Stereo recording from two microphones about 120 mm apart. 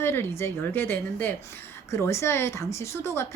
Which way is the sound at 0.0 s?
20° left (ahead or behind).